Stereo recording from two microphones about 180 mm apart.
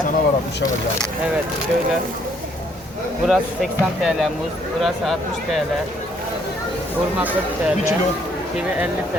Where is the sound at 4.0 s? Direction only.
Centre (ahead or behind).